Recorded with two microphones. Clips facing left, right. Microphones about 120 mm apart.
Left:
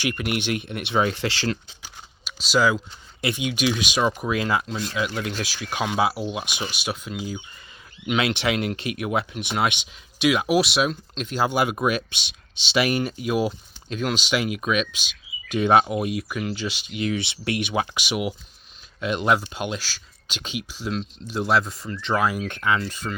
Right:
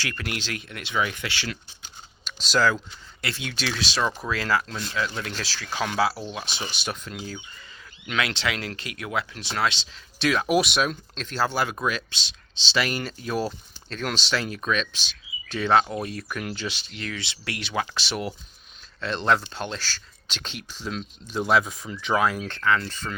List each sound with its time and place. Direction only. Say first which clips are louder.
0.0 s speech: left 7 dB; 20° left (ahead or behind); by 1.5 s 35° left (ahead or behind)
2.2 s speech: left 2 dB; 10° left (ahead or behind)
8.0 s speech: left 4 dB; 20° left (ahead or behind); by 22.3 s centre (ahead or behind)
22.4 s speech: even; 15° left (ahead or behind)